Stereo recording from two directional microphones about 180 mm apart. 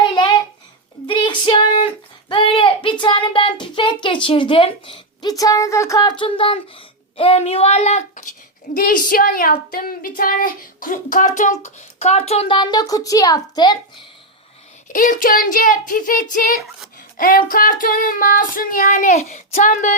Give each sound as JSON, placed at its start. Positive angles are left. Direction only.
{"t": 0.0, "sound": "a sound", "side_deg": 25}
{"t": 1.0, "sound": "female singing", "side_deg": 25}
{"t": 2.3, "sound": "child singing", "side_deg": 30}
{"t": 8.7, "sound": "a woman's voice", "side_deg": 50}
{"t": 14.9, "sound": "a woman's voice", "side_deg": 50}